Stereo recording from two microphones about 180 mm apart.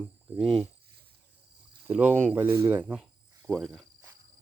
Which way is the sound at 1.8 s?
10° right (ahead or behind).